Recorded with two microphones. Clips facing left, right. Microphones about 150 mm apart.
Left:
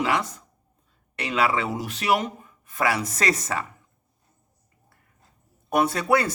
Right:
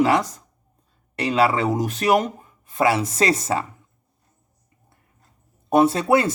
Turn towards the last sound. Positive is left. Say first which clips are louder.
# right 5 dB
turn(degrees=-25)  # may be behind; listen again after turning